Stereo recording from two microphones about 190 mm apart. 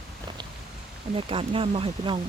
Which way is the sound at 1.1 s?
30° right (ahead or behind).